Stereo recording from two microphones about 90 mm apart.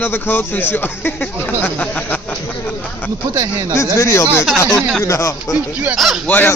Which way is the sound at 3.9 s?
30° left (ahead or behind).